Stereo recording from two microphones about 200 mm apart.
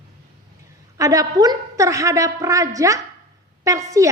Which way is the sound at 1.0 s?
15° right (ahead or behind).